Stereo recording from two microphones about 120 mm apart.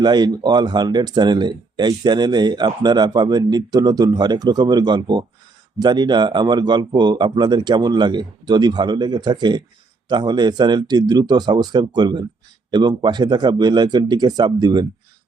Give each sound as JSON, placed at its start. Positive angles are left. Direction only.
{"t": 0.0, "sound": "speech", "side_deg": -35}